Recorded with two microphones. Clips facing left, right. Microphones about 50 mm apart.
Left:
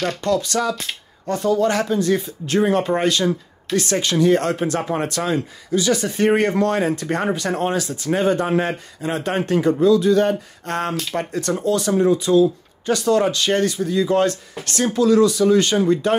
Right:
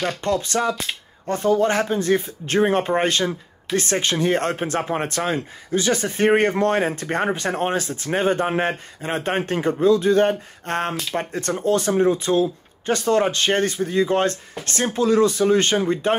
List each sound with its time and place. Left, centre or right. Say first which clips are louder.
0.2 s speech: left 2 dB; right